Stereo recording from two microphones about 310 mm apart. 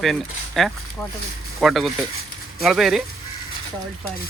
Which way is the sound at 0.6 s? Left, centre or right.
Centre.